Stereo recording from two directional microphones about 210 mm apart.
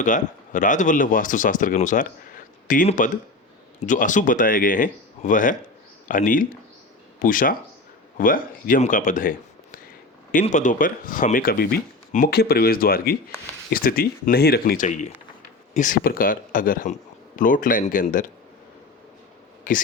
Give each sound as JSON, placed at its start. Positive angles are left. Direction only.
{"t": 0.0, "sound": "speech", "side_deg": 35}
{"t": 10.3, "sound": "speech", "side_deg": 35}
{"t": 19.7, "sound": "speech", "side_deg": 40}